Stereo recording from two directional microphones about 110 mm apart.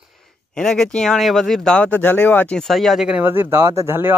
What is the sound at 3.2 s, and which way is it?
Speech, 20° right (ahead or behind).